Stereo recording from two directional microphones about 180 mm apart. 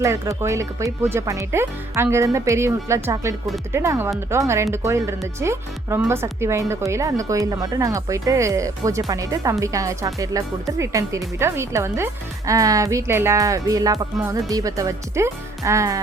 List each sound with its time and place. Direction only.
0.0 s speech: 15° right (ahead or behind)